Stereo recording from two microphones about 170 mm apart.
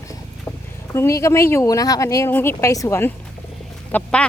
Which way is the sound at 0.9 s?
15° left (ahead or behind).